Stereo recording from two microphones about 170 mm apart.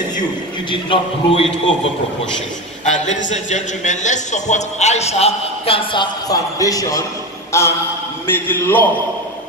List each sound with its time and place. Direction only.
0.7 s a man's voice: 30° left (ahead or behind)
2.8 s speech: 45° left (ahead or behind)
6.2 s a man's voice: 20° left (ahead or behind)